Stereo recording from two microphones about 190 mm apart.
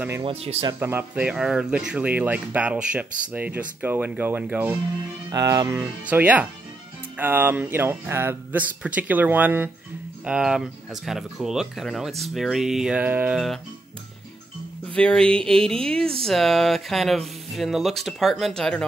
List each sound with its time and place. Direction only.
0.2 s speech: 30° right (ahead or behind)
0.7 s speech: 10° right (ahead or behind)
5.3 s speech: 20° right (ahead or behind); by 13.6 s 5° right (ahead or behind)
15.0 s speech: 5° left (ahead or behind)